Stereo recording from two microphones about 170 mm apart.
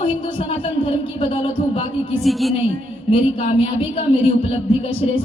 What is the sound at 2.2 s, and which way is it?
Speech, centre (ahead or behind).